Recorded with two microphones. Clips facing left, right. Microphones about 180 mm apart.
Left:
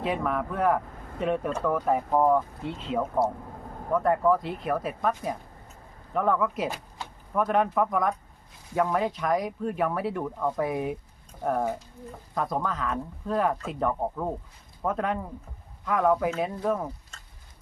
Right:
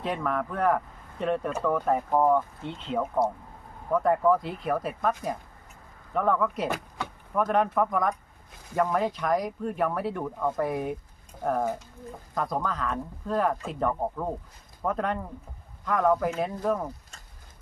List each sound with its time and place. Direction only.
0.0 s speech: 5° left (ahead or behind)
6.7 s power windows: 60° right (ahead or behind)
7.3 s speech: centre (ahead or behind)